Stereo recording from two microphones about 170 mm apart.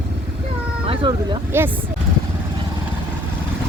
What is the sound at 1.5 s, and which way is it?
Speech, 15° right (ahead or behind).